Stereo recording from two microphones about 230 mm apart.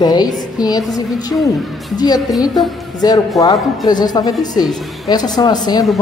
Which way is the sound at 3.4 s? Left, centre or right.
Centre.